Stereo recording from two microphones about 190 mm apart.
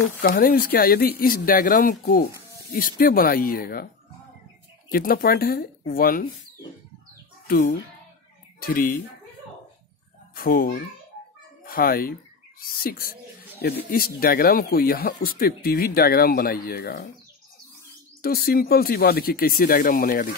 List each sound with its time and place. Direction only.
0.2 s speech: 50° left (ahead or behind)
4.9 s speech: 50° left (ahead or behind)
7.4 s speech: 50° left (ahead or behind)
10.3 s a child's voice: 50° left (ahead or behind)
18.2 s speech: 50° left (ahead or behind)